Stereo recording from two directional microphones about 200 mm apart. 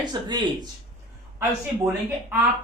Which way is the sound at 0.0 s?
20° right (ahead or behind).